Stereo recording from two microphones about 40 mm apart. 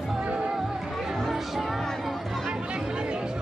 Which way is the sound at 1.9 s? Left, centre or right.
Centre.